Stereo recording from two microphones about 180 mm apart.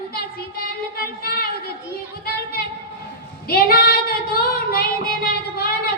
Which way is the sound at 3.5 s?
55° left (ahead or behind).